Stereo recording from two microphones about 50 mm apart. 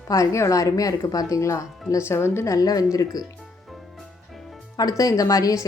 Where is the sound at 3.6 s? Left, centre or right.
Centre.